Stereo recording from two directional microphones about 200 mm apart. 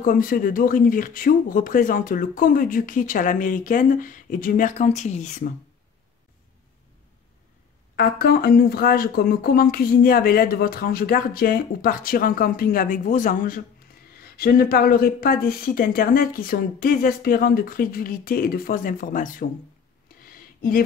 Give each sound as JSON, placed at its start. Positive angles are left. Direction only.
{"t": 0.0, "sound": "speech", "side_deg": 45}
{"t": 7.9, "sound": "speech", "side_deg": 50}
{"t": 20.1, "sound": "a sound", "side_deg": 45}